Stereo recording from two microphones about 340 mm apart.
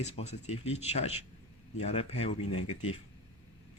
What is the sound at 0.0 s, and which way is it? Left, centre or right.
Speech, centre.